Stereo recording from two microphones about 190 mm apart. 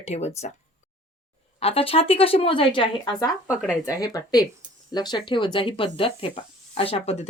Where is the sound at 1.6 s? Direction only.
30° left (ahead or behind).